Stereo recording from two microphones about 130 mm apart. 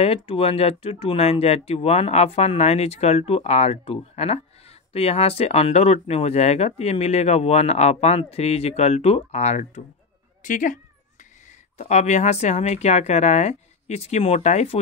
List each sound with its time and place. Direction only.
0.0 s speech: 50° left (ahead or behind)
10.4 s speech: 85° left
11.8 s speech: 65° left (ahead or behind)